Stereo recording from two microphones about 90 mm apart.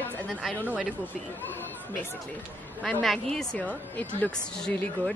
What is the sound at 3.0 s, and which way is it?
A woman's voice, 5° left (ahead or behind).